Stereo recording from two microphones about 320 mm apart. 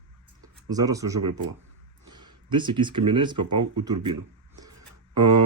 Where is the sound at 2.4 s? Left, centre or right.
Centre.